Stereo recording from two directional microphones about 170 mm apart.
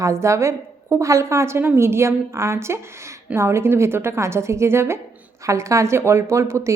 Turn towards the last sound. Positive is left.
turn(degrees=-15)  # may be behind; listen again after turning